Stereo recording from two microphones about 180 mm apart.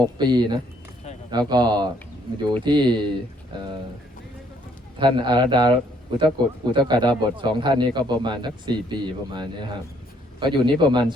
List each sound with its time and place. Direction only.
0.2 s speech: 25° right (ahead or behind)
4.9 s speech: 25° right (ahead or behind)